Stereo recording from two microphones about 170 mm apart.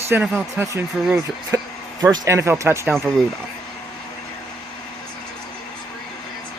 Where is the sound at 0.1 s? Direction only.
15° right (ahead or behind).